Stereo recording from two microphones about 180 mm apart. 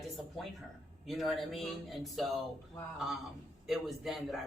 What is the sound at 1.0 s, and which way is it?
Speech, centre (ahead or behind).